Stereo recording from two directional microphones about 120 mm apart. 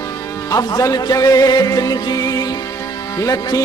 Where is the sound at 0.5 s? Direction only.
30° left (ahead or behind).